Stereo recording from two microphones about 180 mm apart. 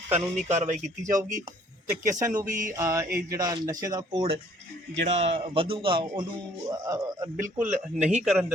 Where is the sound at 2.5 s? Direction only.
45° right (ahead or behind).